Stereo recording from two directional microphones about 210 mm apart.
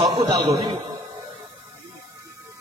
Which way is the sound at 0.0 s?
20° right (ahead or behind).